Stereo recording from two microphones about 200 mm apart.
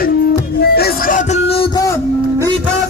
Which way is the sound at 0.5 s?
50° left (ahead or behind).